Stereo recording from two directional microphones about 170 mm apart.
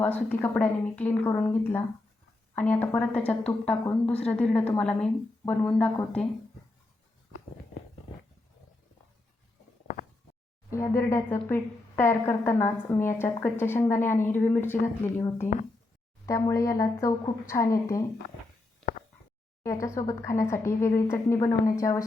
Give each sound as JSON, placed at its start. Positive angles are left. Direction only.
{"t": 0.0, "sound": "a woman's voice", "side_deg": 10}
{"t": 9.8, "sound": "a sound", "side_deg": 50}
{"t": 10.7, "sound": "a woman's voice", "side_deg": 15}
{"t": 19.6, "sound": "a woman's voice", "side_deg": 15}